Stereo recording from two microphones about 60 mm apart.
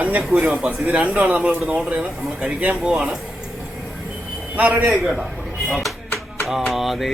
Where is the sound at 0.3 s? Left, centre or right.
Centre.